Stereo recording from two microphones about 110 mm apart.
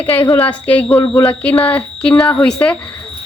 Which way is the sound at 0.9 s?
30° left (ahead or behind).